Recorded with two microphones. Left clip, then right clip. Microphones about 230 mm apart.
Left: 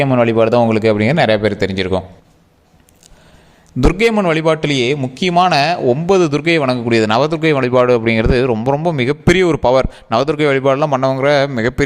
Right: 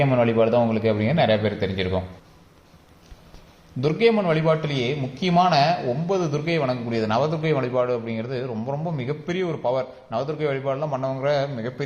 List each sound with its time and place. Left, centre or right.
0.0 s a man's voice: left
3.8 s a man's voice: left